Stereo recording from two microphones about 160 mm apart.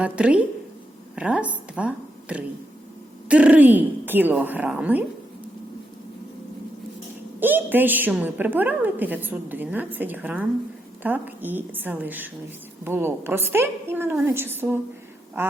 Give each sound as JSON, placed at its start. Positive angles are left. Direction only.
{"t": 0.0, "sound": "a woman's voice", "side_deg": -10}
{"t": 1.1, "sound": "a sound", "side_deg": -10}
{"t": 3.2, "sound": "a woman's voice", "side_deg": -10}
{"t": 7.3, "sound": "a woman's voice", "side_deg": -10}